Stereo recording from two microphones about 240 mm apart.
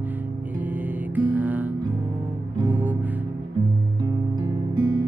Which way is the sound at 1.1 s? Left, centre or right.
Centre.